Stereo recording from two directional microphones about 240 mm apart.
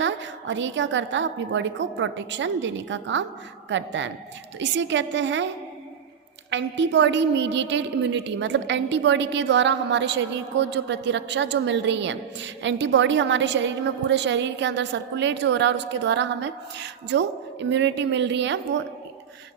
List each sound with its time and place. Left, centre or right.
0.0 s a woman's voice: right
6.5 s a woman's voice: right